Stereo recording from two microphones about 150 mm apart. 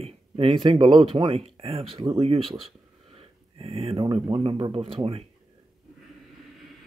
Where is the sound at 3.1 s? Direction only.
40° right (ahead or behind).